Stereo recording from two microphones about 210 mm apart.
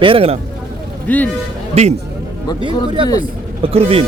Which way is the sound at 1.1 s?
5° left (ahead or behind).